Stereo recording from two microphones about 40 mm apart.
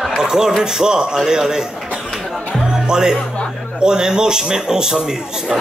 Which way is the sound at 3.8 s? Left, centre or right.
Centre.